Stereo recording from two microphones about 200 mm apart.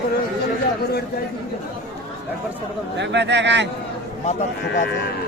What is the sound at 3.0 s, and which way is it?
Speech, 60° right (ahead or behind).